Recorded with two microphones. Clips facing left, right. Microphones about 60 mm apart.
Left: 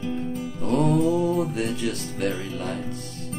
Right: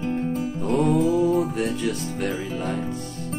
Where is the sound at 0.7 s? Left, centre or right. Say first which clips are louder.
Even; centre.